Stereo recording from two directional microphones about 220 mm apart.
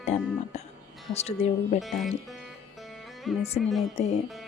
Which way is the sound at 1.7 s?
Centre (ahead or behind).